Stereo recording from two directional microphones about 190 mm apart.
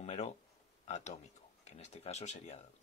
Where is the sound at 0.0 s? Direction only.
35° left (ahead or behind).